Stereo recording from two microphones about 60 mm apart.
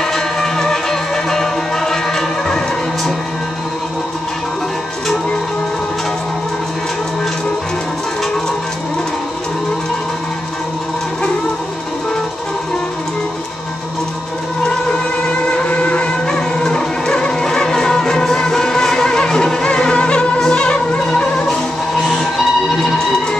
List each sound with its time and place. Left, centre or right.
0.0 s music: centre
15.5 s music: left
16.3 s music: centre